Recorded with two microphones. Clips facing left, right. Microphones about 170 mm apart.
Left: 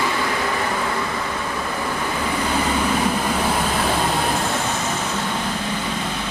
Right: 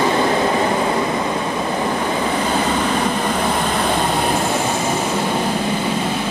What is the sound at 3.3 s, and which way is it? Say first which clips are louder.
Vehicle: right 2 dB; 5° left (ahead or behind).